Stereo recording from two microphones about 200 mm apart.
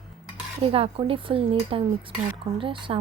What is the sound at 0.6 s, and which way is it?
A woman's voice, 30° right (ahead or behind).